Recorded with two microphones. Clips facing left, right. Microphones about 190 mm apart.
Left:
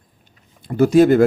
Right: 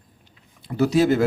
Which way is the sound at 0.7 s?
50° left (ahead or behind).